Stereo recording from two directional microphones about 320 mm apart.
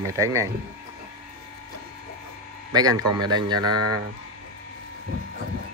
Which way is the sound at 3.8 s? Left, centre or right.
Right.